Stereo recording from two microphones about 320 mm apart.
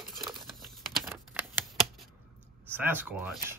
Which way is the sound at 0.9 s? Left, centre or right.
Centre.